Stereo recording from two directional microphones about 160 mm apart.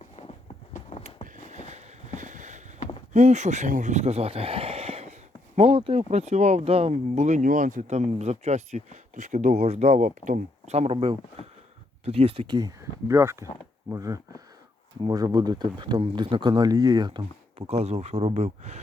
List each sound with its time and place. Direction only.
1.0 s a sound: 50° right (ahead or behind)
3.1 s speech: 45° right (ahead or behind); by 17.7 s 30° right (ahead or behind)
17.7 s speech: 40° right (ahead or behind)